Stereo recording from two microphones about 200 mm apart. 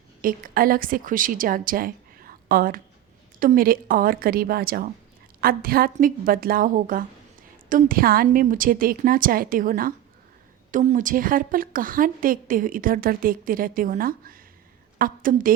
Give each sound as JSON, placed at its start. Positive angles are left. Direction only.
{"t": 0.2, "sound": "a woman's voice", "side_deg": -45}